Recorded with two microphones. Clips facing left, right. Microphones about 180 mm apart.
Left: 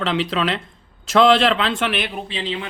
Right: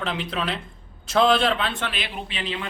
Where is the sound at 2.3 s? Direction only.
30° left (ahead or behind).